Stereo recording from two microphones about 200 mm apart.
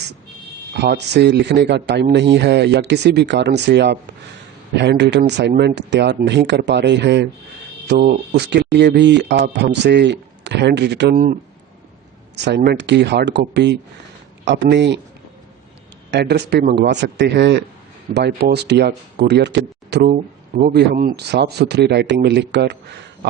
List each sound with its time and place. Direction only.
0.7 s speech: 55° right (ahead or behind)
12.5 s speech: 55° right (ahead or behind)
16.1 s speech: 60° right (ahead or behind); by 20.7 s 40° right (ahead or behind)
20.7 s speech: 55° right (ahead or behind)